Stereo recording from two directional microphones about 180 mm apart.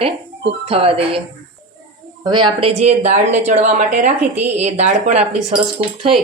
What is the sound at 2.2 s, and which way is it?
Speech, 25° right (ahead or behind).